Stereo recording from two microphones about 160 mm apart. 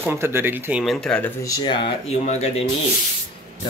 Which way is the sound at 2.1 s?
45° left (ahead or behind).